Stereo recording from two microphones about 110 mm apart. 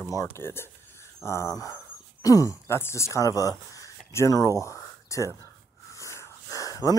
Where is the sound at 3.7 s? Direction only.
30° left (ahead or behind).